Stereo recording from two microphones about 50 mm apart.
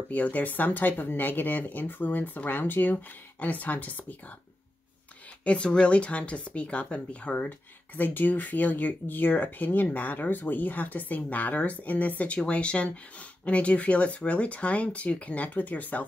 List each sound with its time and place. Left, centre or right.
0.1 s speech: left
5.4 s speech: left
7.4 s speech: left
12.4 s speech: left